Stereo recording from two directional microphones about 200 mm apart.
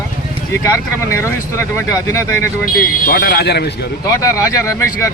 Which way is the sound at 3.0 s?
50° left (ahead or behind).